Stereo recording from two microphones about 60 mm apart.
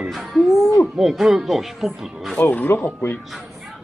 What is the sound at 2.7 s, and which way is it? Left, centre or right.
Speech, left.